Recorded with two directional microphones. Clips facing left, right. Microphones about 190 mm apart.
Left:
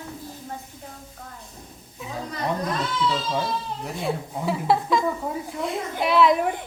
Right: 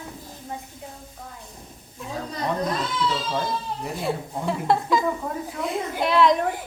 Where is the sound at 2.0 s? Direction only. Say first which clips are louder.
Right 1 dB; centre (ahead or behind).